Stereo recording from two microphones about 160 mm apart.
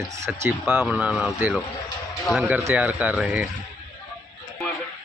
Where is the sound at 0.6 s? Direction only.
5° right (ahead or behind).